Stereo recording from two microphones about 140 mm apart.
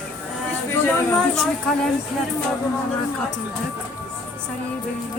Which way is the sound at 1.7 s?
5° left (ahead or behind).